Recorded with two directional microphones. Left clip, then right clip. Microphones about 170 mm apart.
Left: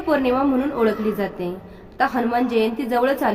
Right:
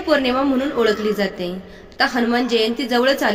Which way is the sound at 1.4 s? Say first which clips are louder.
Right 1 dB; 15° right (ahead or behind).